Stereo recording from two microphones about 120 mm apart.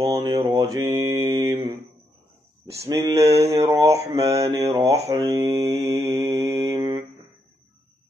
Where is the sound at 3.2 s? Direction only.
60° right (ahead or behind).